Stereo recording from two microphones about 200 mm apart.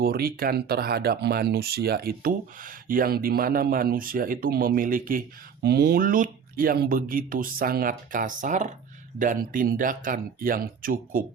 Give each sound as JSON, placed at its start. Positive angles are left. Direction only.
{"t": 0.0, "sound": "speech", "side_deg": -50}